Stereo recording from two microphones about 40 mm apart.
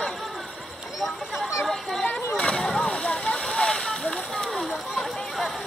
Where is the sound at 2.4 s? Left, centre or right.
Centre.